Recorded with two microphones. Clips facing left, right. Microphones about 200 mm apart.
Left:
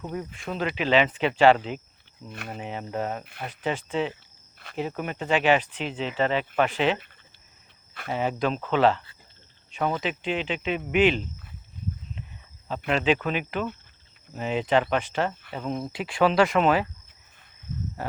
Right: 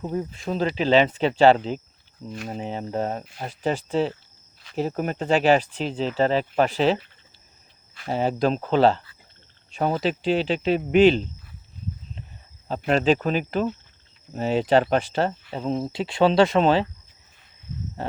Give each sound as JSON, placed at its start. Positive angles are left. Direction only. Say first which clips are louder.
{"t": 0.0, "sound": "speech", "louder": "right 5 dB", "side_deg": -25}
{"t": 8.0, "sound": "speech", "louder": "right 4 dB", "side_deg": -35}
{"t": 12.6, "sound": "speech", "louder": "right 4 dB", "side_deg": -35}